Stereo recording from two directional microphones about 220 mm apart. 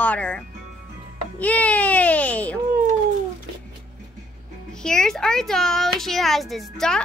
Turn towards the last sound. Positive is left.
turn(degrees=0)  # may be behind; listen again after turning